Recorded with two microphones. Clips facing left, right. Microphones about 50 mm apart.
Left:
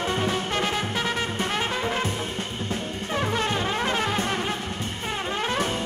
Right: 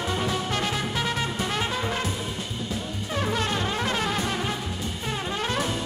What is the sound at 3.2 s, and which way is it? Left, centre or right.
Music, centre.